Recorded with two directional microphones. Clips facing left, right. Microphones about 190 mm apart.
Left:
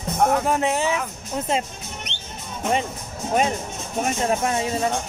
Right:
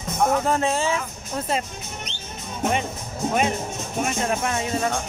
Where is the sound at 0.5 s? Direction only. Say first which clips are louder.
Left 1 dB; 15° left (ahead or behind).